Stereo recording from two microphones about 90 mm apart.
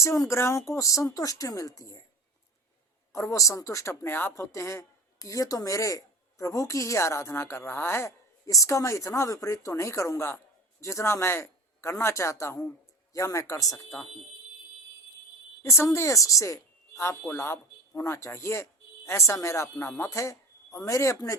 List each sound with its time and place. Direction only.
0.0 s speech: 35° left (ahead or behind)
3.1 s speech: 35° left (ahead or behind)
8.4 s speech: 35° left (ahead or behind)
15.6 s speech: 30° left (ahead or behind)